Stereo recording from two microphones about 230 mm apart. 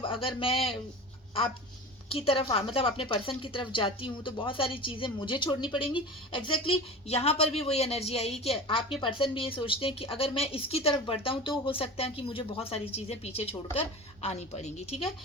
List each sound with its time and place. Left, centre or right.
0.0 s a woman's voice: left
2.0 s a woman's voice: left